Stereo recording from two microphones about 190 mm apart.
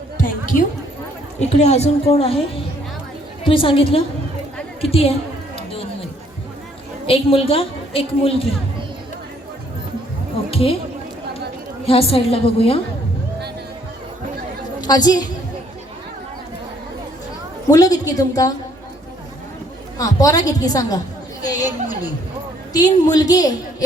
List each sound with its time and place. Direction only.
1.4 s a woman's voice: 35° left (ahead or behind)
3.4 s a woman's voice: 25° left (ahead or behind)
7.1 s a woman's voice: 30° left (ahead or behind)
10.5 s speech: 30° left (ahead or behind)
11.9 s a woman's voice: 30° left (ahead or behind)
14.8 s a woman's voice: 20° left (ahead or behind)
17.7 s a woman's voice: 20° left (ahead or behind)
20.0 s a woman's voice: 15° left (ahead or behind)